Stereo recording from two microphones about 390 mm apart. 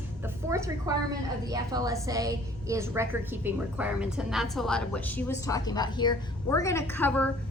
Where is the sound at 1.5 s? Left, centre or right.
Centre.